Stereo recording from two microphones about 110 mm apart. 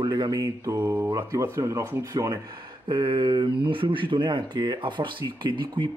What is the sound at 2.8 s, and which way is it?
Speech, 50° right (ahead or behind).